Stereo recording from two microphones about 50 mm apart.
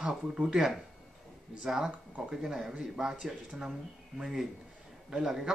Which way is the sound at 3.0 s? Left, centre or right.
Centre.